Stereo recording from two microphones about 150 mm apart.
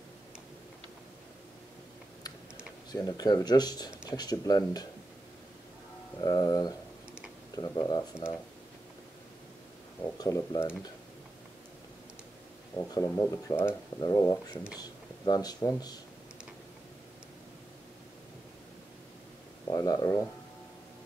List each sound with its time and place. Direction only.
2.9 s speech: 25° left (ahead or behind)
6.2 s speech: 25° left (ahead or behind)
10.1 s speech: 25° left (ahead or behind)
12.9 s speech: 20° left (ahead or behind)
19.7 s speech: 25° left (ahead or behind)